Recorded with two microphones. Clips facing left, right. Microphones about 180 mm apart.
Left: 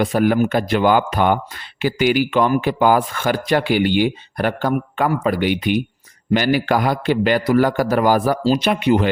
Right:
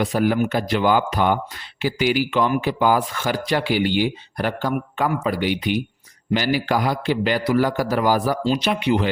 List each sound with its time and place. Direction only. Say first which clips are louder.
0.0 s speech: left 3 dB; 55° left (ahead or behind)